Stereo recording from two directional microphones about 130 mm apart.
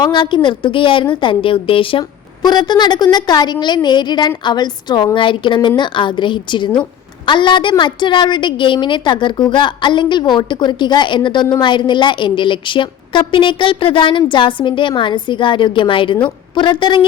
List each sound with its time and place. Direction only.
0.0 s a woman's voice: 35° left (ahead or behind)